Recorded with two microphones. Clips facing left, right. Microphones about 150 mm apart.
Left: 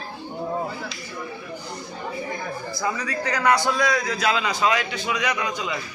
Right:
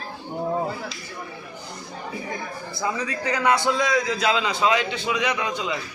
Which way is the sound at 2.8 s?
25° right (ahead or behind).